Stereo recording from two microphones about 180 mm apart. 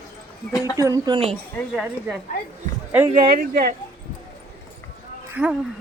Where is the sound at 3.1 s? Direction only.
55° right (ahead or behind).